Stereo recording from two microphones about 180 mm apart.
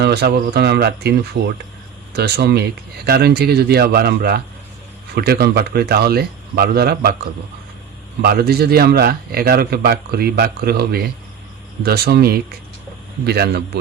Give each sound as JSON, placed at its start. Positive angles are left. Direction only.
{"t": 0.0, "sound": "a man's voice", "side_deg": -65}
{"t": 8.2, "sound": "a man's voice", "side_deg": -60}